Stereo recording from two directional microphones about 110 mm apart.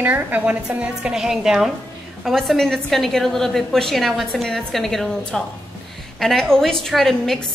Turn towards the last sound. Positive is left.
turn(degrees=0)  # may be behind; listen again after turning